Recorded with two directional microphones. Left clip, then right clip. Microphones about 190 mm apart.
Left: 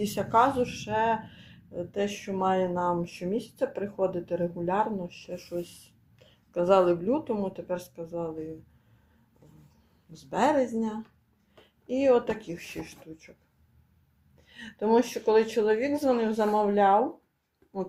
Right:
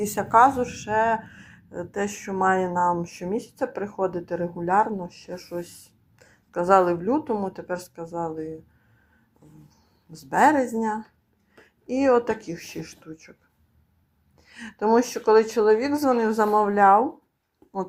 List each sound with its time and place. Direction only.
0.0 s a woman's voice: 15° right (ahead or behind)
10.1 s a woman's voice: 25° right (ahead or behind)
11.9 s a woman's voice: 25° right (ahead or behind)
14.5 s a woman's voice: 20° right (ahead or behind)